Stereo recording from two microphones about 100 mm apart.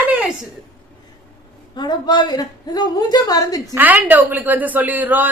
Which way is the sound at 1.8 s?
45° left (ahead or behind).